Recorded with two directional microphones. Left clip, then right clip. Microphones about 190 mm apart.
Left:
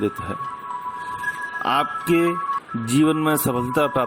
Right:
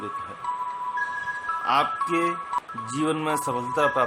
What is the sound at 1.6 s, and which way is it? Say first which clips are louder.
Speech: left 2 dB; 40° left (ahead or behind).